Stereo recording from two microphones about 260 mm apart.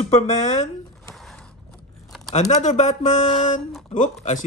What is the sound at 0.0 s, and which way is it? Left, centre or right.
Speech, left.